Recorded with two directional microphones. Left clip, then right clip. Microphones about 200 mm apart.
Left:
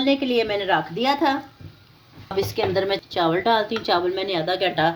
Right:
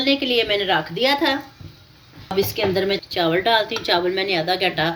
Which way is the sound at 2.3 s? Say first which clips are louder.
Right 2 dB; 40° left (ahead or behind).